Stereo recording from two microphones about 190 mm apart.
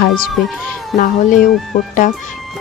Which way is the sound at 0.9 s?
45° left (ahead or behind).